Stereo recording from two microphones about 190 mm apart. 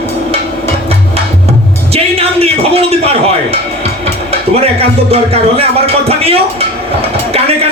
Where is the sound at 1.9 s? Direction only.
30° right (ahead or behind).